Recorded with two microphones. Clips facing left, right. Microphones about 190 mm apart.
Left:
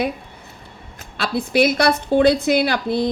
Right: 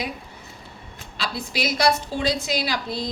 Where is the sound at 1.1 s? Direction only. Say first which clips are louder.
Left 10 dB; 55° left (ahead or behind).